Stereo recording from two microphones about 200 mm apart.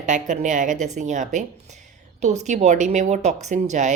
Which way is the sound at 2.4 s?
35° right (ahead or behind).